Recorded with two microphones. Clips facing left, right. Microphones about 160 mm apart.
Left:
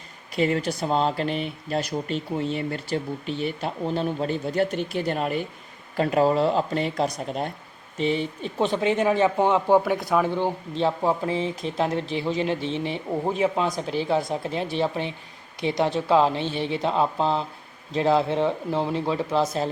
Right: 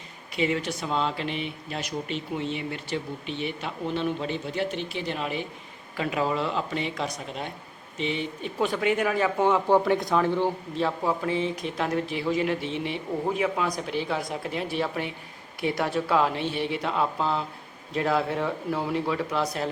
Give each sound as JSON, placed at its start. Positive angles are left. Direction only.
{"t": 0.3, "sound": "speech", "side_deg": 40}
{"t": 10.2, "sound": "speech", "side_deg": 15}
{"t": 10.8, "sound": "speech", "side_deg": 30}